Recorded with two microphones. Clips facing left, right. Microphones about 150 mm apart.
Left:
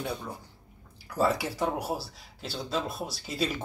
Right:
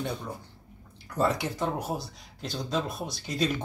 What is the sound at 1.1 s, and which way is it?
Speech, 5° left (ahead or behind).